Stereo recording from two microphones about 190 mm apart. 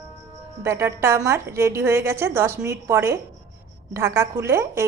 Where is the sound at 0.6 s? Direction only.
15° right (ahead or behind).